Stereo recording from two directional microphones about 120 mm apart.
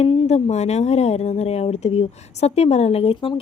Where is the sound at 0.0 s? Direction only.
55° left (ahead or behind).